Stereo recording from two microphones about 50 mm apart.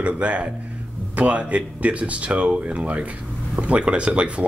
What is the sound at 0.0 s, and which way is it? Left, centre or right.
Speech, right.